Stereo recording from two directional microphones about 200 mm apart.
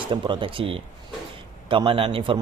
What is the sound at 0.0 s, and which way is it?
A man's voice, 25° right (ahead or behind).